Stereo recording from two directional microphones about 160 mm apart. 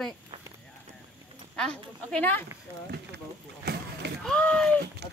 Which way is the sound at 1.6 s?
5° left (ahead or behind).